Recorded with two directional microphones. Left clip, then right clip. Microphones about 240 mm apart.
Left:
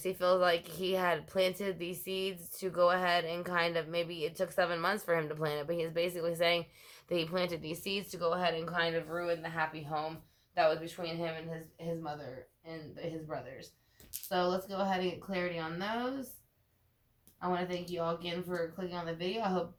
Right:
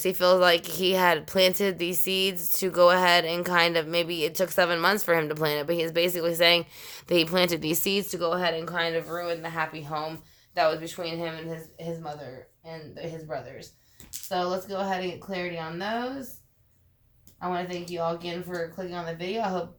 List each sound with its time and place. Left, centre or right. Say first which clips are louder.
0.0 s speech: right 8 dB; right
14.3 s speech: right 4 dB; right
17.4 s speech: right 4 dB; right